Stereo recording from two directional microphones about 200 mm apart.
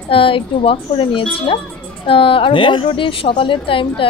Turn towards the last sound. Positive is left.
turn(degrees=25)  # may be behind; listen again after turning